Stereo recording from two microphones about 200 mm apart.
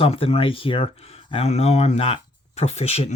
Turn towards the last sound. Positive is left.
turn(degrees=30)  # may be behind; listen again after turning